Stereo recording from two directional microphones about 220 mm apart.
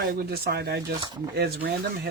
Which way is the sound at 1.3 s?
45° right (ahead or behind).